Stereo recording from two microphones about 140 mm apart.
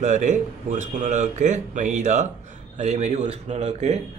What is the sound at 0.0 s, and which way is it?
A man's voice, 60° right (ahead or behind).